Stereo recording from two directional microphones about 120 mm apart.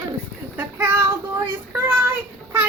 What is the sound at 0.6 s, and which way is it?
Child singing, 15° right (ahead or behind).